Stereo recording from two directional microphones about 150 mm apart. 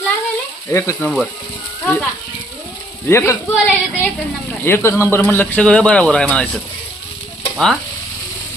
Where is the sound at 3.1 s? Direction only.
15° left (ahead or behind).